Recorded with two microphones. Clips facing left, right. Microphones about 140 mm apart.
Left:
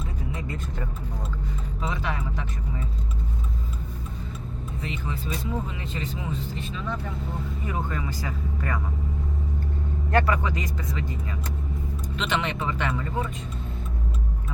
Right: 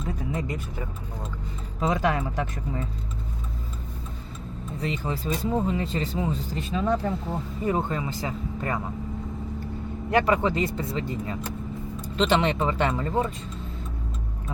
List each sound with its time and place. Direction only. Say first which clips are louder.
0.4 s speech: right 1 dB; 15° right (ahead or behind)
1.8 s speech: right 7 dB; 45° right (ahead or behind)
4.8 s speech: right 5 dB; 35° right (ahead or behind)
7.7 s speech: right 6 dB; 25° right (ahead or behind)
10.1 s speech: right 2 dB; 20° right (ahead or behind); by 13.3 s 35° right (ahead or behind)